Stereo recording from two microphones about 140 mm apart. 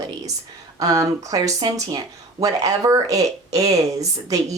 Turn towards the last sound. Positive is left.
turn(degrees=-25)  # may be behind; listen again after turning